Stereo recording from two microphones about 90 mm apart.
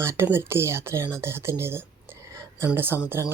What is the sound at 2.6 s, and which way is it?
Speech, 25° right (ahead or behind).